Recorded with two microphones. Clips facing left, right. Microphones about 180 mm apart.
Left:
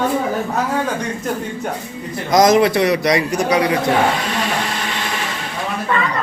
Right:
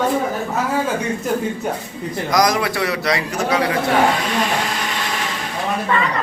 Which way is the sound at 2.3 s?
25° left (ahead or behind).